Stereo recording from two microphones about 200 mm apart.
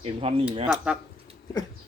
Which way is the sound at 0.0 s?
30° right (ahead or behind).